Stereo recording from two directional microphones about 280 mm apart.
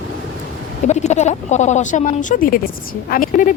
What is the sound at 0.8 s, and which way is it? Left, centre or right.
Speech, left.